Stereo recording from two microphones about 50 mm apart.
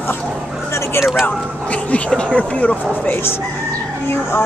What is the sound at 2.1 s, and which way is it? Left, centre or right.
Speech, centre.